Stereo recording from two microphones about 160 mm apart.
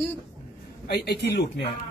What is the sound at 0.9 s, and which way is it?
Speech, 90° left.